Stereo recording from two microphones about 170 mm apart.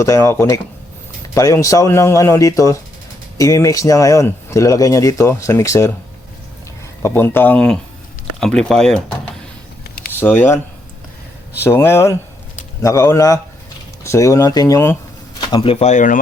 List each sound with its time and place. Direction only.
0.0 s speech: 15° left (ahead or behind)
7.0 s speech: 15° left (ahead or behind)
10.3 s speech: 10° left (ahead or behind)
11.6 s speech: 15° left (ahead or behind); by 16.1 s 45° left (ahead or behind)